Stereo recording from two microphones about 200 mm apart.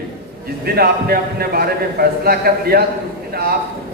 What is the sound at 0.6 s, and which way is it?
A man's voice, 50° right (ahead or behind).